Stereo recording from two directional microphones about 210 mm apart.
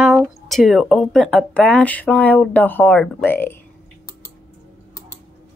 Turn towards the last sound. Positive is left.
turn(degrees=10)  # may be behind; listen again after turning